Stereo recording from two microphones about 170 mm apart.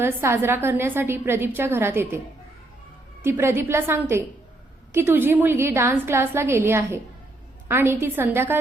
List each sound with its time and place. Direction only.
0.0 s a woman's voice: 15° right (ahead or behind)